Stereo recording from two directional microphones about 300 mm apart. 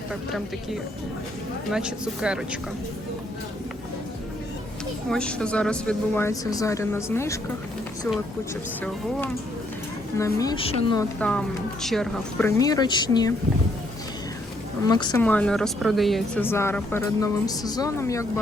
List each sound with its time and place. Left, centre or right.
0.1 s speech: centre
5.0 s speech: centre
10.2 s speech: centre
11.2 s speech: centre
14.8 s speech: centre